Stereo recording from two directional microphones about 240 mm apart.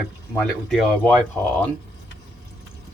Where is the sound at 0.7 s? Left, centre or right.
Centre.